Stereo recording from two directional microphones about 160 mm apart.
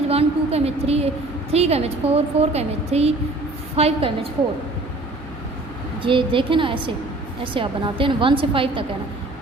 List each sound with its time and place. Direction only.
0.1 s a woman's voice: 40° right (ahead or behind)
6.0 s a woman's voice: 30° right (ahead or behind)